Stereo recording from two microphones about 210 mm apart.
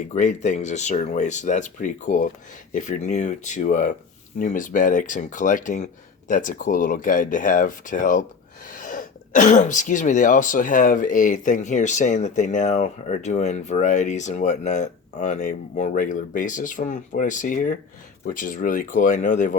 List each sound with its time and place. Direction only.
0.1 s speech: 35° left (ahead or behind)